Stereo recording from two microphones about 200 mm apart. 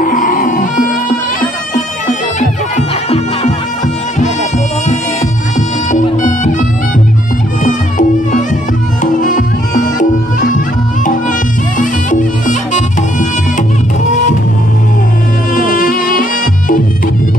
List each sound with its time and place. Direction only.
0.0 s music: 40° left (ahead or behind)
5.9 s music: 40° left (ahead or behind)
7.6 s music: 40° left (ahead or behind)
11.8 s music: 40° left (ahead or behind)
15.5 s music: 40° left (ahead or behind)